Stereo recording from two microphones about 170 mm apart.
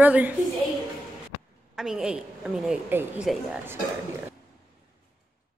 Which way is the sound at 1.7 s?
5° right (ahead or behind).